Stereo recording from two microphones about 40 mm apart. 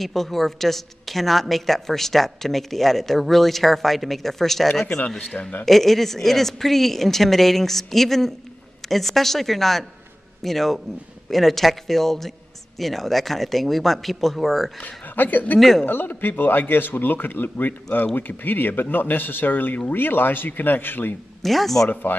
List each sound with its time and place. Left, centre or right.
0.0 s a woman's voice: centre
5.4 s speech: left
5.7 s a woman's voice: centre
14.8 s a man's voice: left
21.4 s a woman's voice: centre
22.1 s a man's voice: left